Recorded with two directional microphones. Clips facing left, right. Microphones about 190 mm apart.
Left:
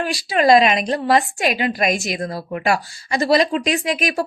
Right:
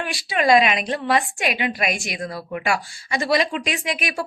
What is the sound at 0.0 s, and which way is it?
A woman's voice, 40° left (ahead or behind).